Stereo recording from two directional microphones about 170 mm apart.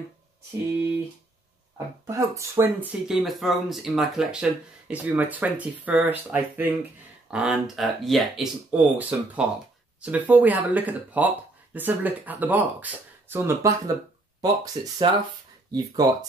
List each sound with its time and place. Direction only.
2.0 s speech: 15° right (ahead or behind)